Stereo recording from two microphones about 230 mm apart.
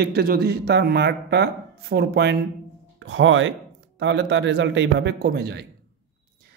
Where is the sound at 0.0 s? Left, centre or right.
Right.